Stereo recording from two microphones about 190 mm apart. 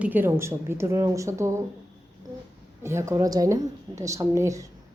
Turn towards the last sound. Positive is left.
turn(degrees=-15)  # may be behind; listen again after turning